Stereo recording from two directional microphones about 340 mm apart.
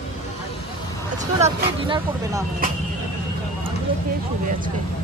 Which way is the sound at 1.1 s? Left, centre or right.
Centre.